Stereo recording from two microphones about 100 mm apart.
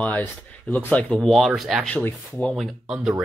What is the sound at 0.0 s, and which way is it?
Speech, 15° left (ahead or behind).